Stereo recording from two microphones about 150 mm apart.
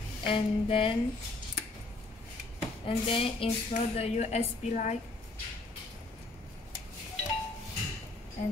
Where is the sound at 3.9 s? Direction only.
45° left (ahead or behind).